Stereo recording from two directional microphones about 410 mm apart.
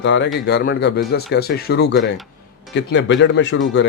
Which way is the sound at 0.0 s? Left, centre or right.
Left.